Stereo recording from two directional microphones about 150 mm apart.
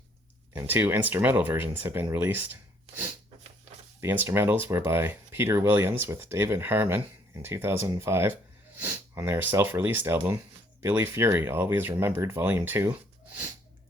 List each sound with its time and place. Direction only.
0.5 s speech: 15° right (ahead or behind)
4.0 s speech: 15° right (ahead or behind)